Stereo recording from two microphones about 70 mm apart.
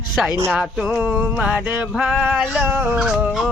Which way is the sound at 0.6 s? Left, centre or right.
Centre.